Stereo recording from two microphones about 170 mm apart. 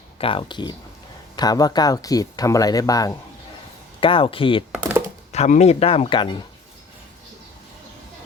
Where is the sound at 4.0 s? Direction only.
30° left (ahead or behind).